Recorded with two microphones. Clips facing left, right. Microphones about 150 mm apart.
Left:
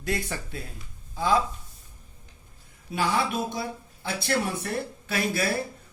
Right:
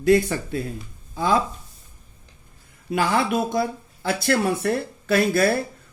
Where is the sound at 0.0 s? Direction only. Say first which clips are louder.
Right 13 dB; 60° right (ahead or behind).